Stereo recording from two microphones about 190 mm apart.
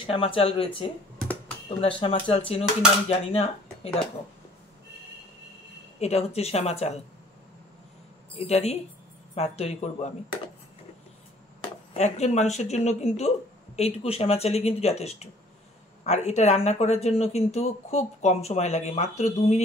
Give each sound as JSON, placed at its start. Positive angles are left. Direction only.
{"t": 0.0, "sound": "speech", "side_deg": 30}
{"t": 5.9, "sound": "speech", "side_deg": 35}
{"t": 8.4, "sound": "speech", "side_deg": 35}
{"t": 11.9, "sound": "speech", "side_deg": 35}